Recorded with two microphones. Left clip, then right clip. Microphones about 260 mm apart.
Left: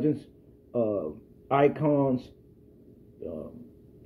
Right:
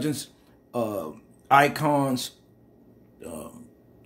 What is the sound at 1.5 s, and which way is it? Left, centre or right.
Speech, centre.